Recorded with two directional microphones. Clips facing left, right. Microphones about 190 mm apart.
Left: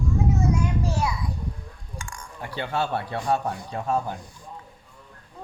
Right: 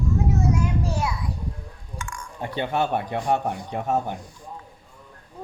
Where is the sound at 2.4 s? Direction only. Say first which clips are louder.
Right 3 dB; 20° right (ahead or behind).